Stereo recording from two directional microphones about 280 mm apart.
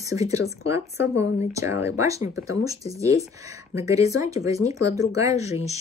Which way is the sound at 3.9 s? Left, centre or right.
Centre.